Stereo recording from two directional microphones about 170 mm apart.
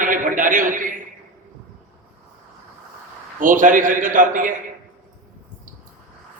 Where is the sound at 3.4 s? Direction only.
50° right (ahead or behind).